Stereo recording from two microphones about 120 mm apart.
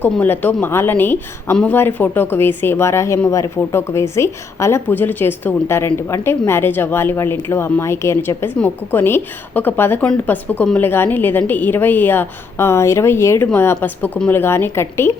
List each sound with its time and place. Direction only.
0.0 s a woman's voice: 15° left (ahead or behind)